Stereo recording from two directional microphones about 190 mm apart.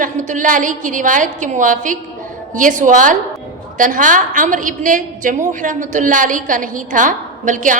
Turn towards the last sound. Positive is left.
turn(degrees=-40)  # may be behind; listen again after turning